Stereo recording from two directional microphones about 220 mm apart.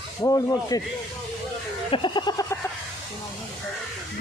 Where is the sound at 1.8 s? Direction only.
20° left (ahead or behind).